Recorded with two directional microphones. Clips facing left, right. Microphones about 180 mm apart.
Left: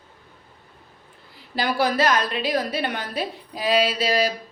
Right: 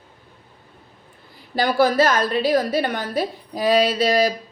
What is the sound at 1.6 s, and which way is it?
A woman's voice, 40° right (ahead or behind).